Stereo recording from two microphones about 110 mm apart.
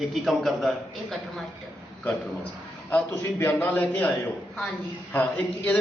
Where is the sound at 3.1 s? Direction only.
20° left (ahead or behind).